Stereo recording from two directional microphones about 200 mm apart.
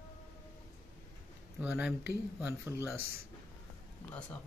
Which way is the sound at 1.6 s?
5° right (ahead or behind).